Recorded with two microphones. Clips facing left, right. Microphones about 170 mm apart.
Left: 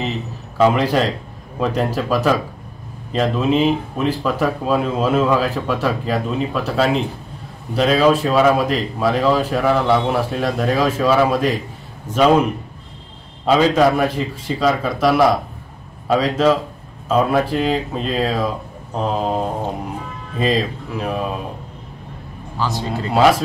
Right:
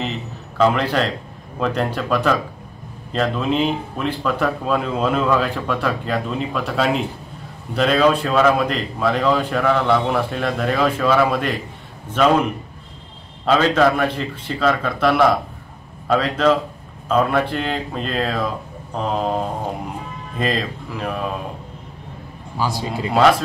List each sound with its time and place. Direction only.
0.6 s a man's voice: 5° left (ahead or behind)
13.5 s a man's voice: 10° left (ahead or behind)
22.6 s speech: 10° right (ahead or behind)